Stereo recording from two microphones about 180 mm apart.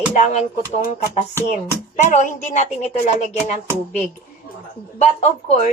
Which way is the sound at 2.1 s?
40° left (ahead or behind).